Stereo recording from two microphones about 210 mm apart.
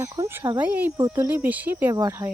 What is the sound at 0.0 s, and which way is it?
Speech, 15° right (ahead or behind).